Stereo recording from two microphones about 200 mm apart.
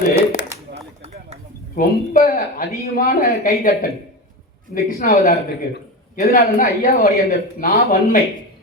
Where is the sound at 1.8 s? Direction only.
50° left (ahead or behind).